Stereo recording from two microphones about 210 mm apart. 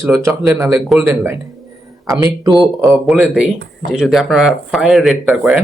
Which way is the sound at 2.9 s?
Centre (ahead or behind).